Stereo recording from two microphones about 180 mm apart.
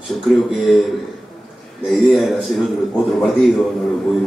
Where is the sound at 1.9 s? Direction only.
Centre (ahead or behind).